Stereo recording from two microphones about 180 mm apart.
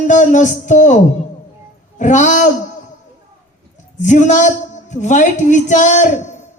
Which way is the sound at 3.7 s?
45° left (ahead or behind).